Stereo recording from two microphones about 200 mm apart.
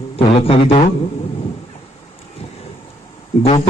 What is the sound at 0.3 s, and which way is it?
Speech, 30° left (ahead or behind).